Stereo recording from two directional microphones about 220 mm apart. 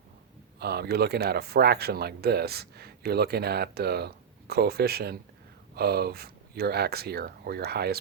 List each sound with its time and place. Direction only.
0.6 s speech: 45° right (ahead or behind)